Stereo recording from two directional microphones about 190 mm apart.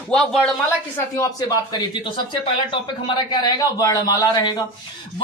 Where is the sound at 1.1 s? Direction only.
20° left (ahead or behind).